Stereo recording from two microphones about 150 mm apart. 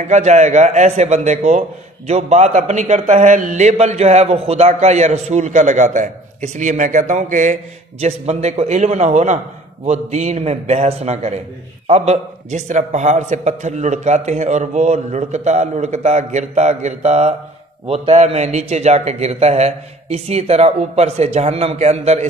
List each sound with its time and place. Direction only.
0.1 s a man's voice: 50° right (ahead or behind)